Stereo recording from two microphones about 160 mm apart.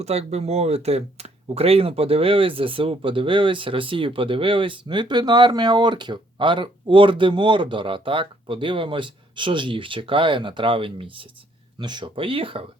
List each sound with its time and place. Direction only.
0.0 s speech: 40° right (ahead or behind)